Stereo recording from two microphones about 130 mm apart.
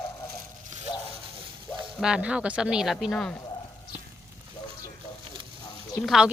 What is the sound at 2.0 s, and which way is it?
A woman's voice, 5° right (ahead or behind).